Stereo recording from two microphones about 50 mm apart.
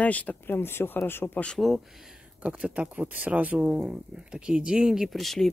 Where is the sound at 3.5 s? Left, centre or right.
Centre.